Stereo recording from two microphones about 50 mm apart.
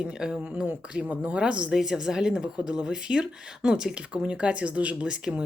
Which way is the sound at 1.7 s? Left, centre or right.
Centre.